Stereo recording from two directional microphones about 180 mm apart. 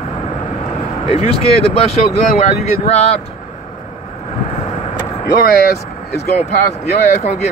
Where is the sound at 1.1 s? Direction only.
35° left (ahead or behind).